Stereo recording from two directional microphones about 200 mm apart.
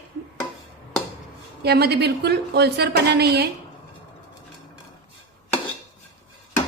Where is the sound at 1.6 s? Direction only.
55° right (ahead or behind).